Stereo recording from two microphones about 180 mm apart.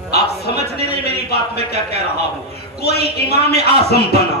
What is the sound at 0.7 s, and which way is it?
Speech, 60° left (ahead or behind).